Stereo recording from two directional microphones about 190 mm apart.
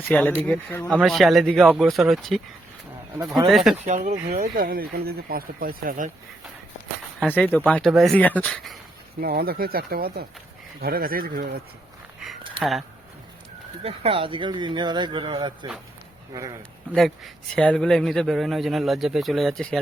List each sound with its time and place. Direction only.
0.1 s speech: 5° left (ahead or behind)
3.5 s speech: centre (ahead or behind)
3.8 s speech: 40° right (ahead or behind)
7.3 s speech: 10° left (ahead or behind)
9.2 s speech: 55° right (ahead or behind)
12.5 s speech: centre (ahead or behind)
13.8 s speech: 30° right (ahead or behind)
16.9 s speech: centre (ahead or behind)